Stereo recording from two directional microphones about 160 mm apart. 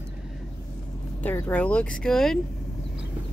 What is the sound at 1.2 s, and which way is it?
Speech, 10° left (ahead or behind).